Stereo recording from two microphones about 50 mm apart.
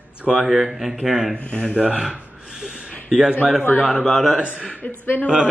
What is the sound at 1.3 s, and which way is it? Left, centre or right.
Speech, centre.